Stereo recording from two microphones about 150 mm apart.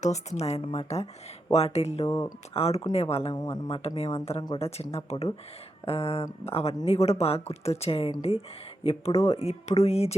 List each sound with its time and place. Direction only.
0.0 s speech: 50° left (ahead or behind)
2.0 s speech: 20° left (ahead or behind)
2.5 s speech: 40° left (ahead or behind)
3.3 s speech: 25° left (ahead or behind); by 10.2 s 45° left (ahead or behind)